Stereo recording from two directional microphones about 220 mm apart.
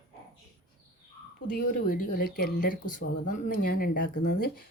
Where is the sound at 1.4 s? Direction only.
40° left (ahead or behind).